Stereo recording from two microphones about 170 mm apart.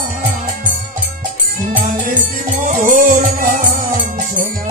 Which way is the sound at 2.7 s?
50° right (ahead or behind).